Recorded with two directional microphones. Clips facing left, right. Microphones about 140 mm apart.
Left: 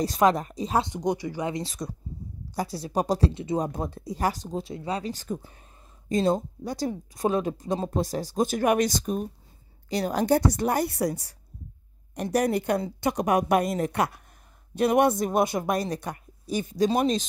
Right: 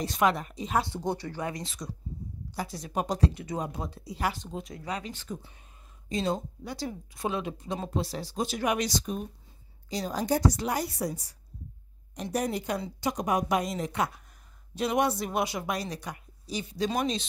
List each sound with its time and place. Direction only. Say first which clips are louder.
0.0 s speech: left 4 dB; 40° left (ahead or behind)
0.8 s speech: left 4 dB; 15° left (ahead or behind)
1.5 s speech: left 6 dB; 35° left (ahead or behind)
3.5 s speech: left 6 dB; 45° left (ahead or behind)
9.8 s a woman's voice: left 6 dB; 65° left (ahead or behind)
14.8 s speech: left 6 dB; 55° left (ahead or behind)